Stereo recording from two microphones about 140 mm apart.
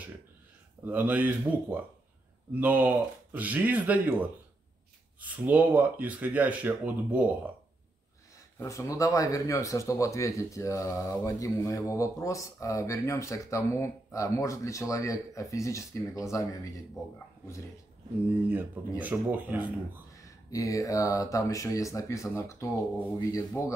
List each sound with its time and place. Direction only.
0.8 s speech: 15° right (ahead or behind)
5.2 s speech: 10° right (ahead or behind)
8.5 s speech: 20° left (ahead or behind)
18.5 s speech: 10° right (ahead or behind)
20.2 s speech: 25° left (ahead or behind)